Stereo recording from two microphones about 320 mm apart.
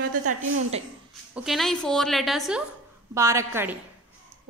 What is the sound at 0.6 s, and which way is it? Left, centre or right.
Speech, centre.